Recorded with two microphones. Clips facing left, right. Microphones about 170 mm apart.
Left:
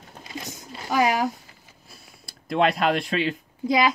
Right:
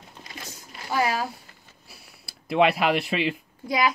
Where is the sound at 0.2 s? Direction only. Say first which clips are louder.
Left 6 dB; 20° left (ahead or behind).